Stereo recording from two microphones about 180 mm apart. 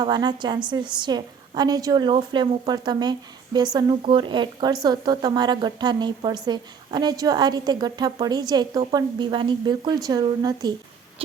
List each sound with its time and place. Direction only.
0.0 s a woman's voice: 25° right (ahead or behind)